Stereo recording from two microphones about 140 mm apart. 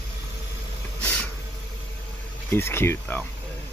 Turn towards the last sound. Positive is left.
turn(degrees=15)  # may be behind; listen again after turning